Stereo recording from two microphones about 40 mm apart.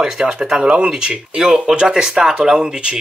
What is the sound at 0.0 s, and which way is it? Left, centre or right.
Speech, centre.